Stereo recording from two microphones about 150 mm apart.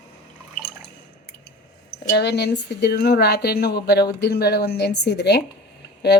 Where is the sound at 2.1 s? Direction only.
90° left.